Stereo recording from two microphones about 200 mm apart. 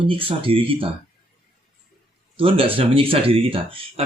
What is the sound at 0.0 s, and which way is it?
Speech, 25° right (ahead or behind).